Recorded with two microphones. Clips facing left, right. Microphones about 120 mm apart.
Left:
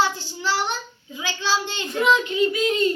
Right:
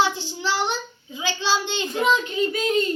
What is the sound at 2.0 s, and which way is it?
Speech, 40° right (ahead or behind).